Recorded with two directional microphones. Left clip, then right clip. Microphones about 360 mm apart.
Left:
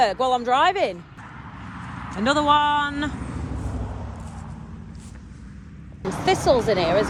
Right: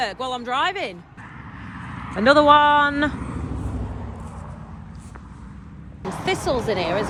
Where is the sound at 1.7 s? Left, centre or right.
Centre.